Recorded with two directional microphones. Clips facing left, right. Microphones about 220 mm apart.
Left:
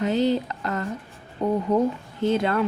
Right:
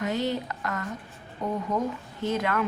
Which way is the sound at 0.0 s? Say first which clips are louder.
Left 6 dB; 30° left (ahead or behind).